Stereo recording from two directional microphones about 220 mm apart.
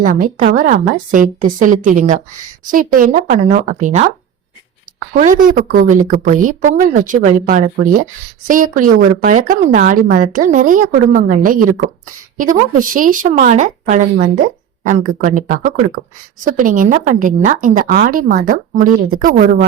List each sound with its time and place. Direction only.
0.0 s speech: 40° right (ahead or behind)
5.1 s speech: 35° right (ahead or behind)